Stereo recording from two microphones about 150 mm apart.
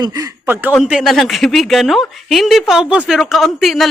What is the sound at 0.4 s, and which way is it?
Speech, 15° right (ahead or behind).